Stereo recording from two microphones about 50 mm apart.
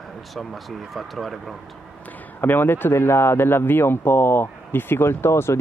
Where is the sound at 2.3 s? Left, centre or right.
Left.